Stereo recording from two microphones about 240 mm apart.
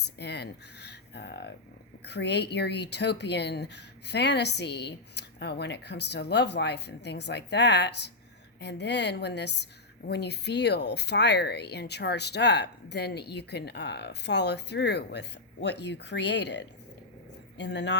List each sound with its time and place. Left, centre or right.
0.2 s speech: left